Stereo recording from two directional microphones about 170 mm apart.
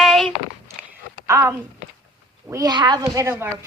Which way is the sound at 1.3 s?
15° right (ahead or behind).